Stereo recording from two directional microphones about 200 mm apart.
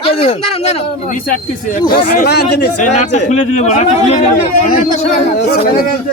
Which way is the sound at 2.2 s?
55° left (ahead or behind).